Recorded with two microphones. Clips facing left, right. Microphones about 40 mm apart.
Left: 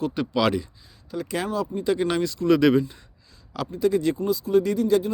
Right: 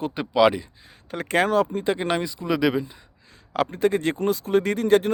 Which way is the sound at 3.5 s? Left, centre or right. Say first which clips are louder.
Right 1 dB; right.